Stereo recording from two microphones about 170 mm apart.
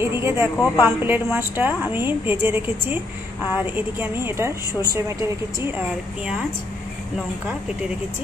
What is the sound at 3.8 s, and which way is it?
A woman's voice, 15° right (ahead or behind).